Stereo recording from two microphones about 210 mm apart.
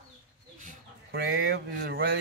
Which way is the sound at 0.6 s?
45° right (ahead or behind).